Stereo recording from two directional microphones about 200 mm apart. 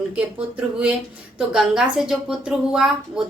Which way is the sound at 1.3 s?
5° right (ahead or behind).